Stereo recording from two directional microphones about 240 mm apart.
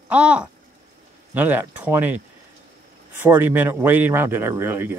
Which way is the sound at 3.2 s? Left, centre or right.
Centre.